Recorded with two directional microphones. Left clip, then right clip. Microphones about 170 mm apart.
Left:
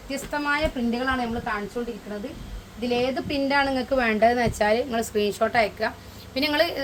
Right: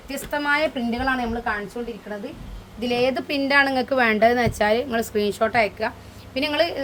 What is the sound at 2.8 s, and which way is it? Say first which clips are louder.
A woman's voice: right 3 dB; 50° right (ahead or behind).